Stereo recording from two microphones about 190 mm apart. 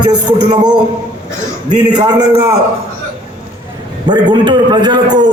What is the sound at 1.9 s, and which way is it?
Music, 20° right (ahead or behind).